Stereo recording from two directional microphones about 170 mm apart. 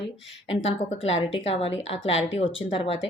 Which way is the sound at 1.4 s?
35° left (ahead or behind).